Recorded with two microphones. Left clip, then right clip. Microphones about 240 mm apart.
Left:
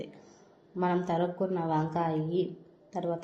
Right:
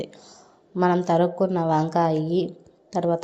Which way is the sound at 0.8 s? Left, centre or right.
Right.